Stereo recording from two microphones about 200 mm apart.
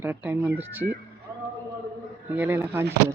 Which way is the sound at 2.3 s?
10° right (ahead or behind).